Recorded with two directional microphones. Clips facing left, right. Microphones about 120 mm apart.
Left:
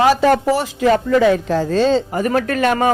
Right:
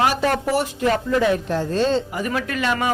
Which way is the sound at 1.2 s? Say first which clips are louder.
Left 5 dB; 90° left.